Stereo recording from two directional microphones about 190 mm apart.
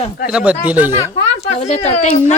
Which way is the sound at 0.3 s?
5° right (ahead or behind).